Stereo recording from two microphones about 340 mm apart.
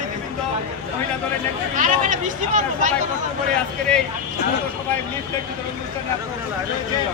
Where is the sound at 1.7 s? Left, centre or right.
Right.